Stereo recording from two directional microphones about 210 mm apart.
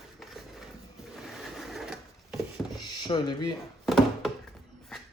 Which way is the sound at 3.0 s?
20° left (ahead or behind).